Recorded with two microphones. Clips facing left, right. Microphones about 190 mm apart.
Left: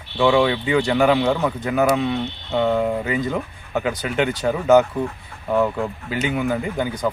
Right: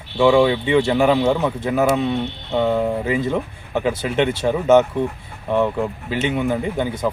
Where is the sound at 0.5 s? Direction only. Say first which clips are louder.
Right 3 dB; 25° right (ahead or behind).